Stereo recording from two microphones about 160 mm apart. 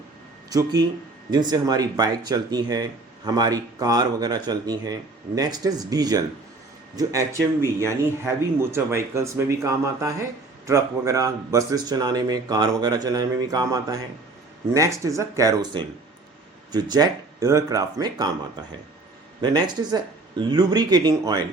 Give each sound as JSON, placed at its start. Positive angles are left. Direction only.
{"t": 0.5, "sound": "speech", "side_deg": -25}
{"t": 19.4, "sound": "speech", "side_deg": -25}